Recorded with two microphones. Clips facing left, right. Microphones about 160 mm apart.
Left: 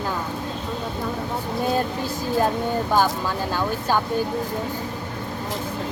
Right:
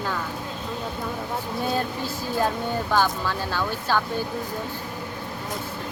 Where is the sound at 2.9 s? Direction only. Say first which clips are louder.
Left 1 dB; 15° left (ahead or behind).